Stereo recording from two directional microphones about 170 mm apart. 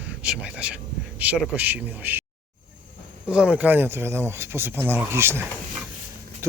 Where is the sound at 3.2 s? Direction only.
5° right (ahead or behind).